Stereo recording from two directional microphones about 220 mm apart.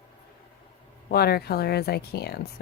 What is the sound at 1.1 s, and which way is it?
A woman's voice, 45° left (ahead or behind).